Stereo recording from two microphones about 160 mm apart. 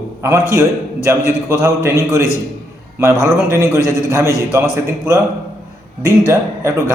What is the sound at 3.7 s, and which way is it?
Speech, 20° left (ahead or behind).